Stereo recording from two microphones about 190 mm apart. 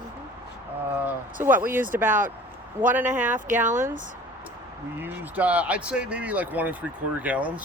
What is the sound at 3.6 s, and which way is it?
Speech, 40° right (ahead or behind).